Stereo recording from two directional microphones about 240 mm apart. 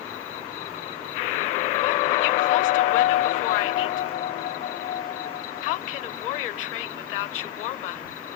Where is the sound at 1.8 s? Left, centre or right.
Left.